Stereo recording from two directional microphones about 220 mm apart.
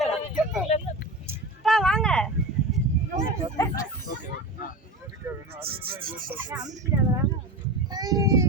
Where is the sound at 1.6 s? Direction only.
Centre (ahead or behind).